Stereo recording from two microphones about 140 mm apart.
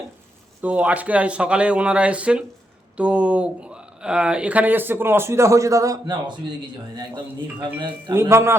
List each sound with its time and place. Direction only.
0.6 s speech: 10° right (ahead or behind); by 6.3 s 30° right (ahead or behind)
7.6 s speech: 30° right (ahead or behind)
8.1 s a man's voice: 20° right (ahead or behind)